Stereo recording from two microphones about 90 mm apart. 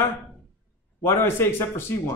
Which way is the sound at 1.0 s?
25° left (ahead or behind).